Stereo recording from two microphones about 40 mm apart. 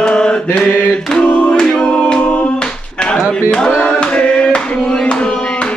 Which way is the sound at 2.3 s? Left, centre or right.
Left.